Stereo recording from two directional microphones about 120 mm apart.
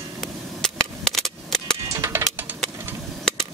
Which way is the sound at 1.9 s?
20° right (ahead or behind).